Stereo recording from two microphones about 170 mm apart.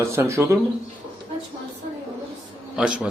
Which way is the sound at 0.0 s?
15° right (ahead or behind).